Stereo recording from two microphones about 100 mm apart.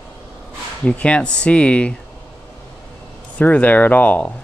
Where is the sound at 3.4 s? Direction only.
15° left (ahead or behind).